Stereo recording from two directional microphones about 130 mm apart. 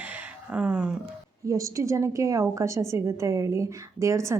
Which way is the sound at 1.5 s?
25° right (ahead or behind).